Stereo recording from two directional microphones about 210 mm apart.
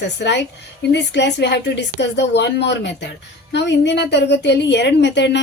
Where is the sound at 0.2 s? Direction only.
55° left (ahead or behind).